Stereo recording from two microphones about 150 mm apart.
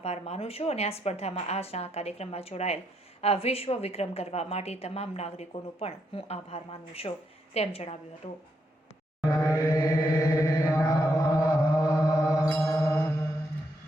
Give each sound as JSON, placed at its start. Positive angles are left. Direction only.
{"t": 0.0, "sound": "a woman's voice", "side_deg": 45}
{"t": 9.3, "sound": "mantra", "side_deg": 25}
{"t": 10.8, "sound": "chant", "side_deg": 25}
{"t": 12.5, "sound": "music", "side_deg": 20}